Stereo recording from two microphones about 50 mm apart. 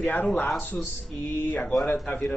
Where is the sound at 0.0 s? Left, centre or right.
Left.